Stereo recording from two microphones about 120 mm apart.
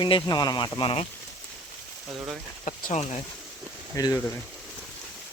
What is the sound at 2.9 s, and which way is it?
Speech, 65° left (ahead or behind).